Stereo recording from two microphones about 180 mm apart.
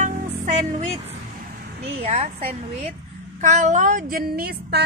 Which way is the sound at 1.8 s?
35° right (ahead or behind).